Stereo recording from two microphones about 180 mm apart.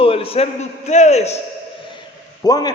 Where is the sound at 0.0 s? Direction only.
30° left (ahead or behind).